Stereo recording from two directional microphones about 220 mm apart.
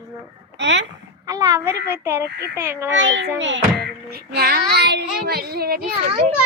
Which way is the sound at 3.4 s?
50° right (ahead or behind).